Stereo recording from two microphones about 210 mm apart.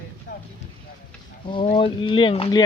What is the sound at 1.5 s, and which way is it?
Speech, 25° left (ahead or behind).